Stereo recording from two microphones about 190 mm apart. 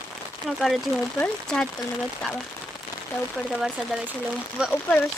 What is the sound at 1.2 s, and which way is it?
Speech, 5° left (ahead or behind).